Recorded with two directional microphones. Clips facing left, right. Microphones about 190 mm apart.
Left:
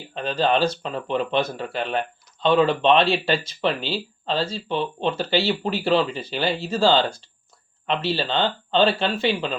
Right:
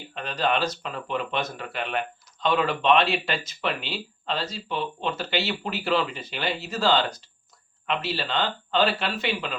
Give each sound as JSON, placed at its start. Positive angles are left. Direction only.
{"t": 0.1, "sound": "speech", "side_deg": 30}